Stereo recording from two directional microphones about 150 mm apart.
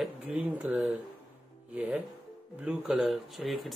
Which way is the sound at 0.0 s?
5° right (ahead or behind).